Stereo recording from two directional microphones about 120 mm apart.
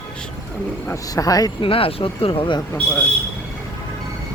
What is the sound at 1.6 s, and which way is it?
Speech, 50° left (ahead or behind).